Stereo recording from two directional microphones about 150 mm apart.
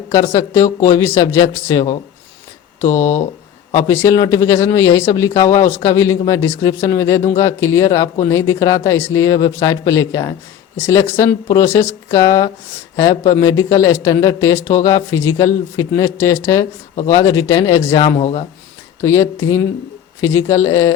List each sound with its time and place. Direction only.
0.1 s speech: 20° left (ahead or behind)
18.2 s speech: 50° left (ahead or behind)
19.0 s speech: 20° left (ahead or behind)